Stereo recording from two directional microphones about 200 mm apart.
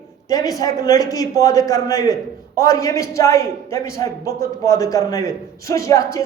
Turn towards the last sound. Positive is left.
turn(degrees=15)  # may be behind; listen again after turning